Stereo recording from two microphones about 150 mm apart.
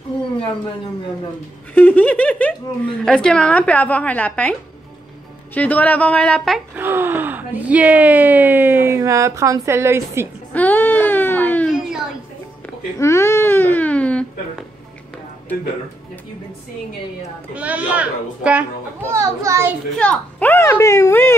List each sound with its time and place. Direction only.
1.7 s a woman's voice: 10° left (ahead or behind)
6.7 s speech: 15° right (ahead or behind)
10.5 s a sound: 10° left (ahead or behind)
13.0 s speech: 20° left (ahead or behind)
17.6 s speech: 10° right (ahead or behind)
19.1 s a child's voice: 20° right (ahead or behind)
20.0 s a woman's voice: 10° left (ahead or behind)